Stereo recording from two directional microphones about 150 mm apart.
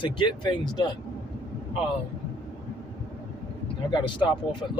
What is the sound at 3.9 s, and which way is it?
Speech, 30° left (ahead or behind).